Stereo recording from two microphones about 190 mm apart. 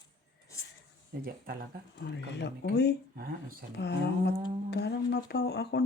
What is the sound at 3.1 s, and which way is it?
Speech, 50° right (ahead or behind).